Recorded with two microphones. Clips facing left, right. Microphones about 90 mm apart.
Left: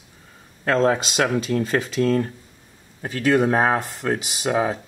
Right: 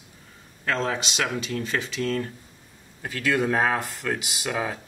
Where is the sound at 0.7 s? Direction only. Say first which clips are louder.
Left 7 dB; 40° left (ahead or behind).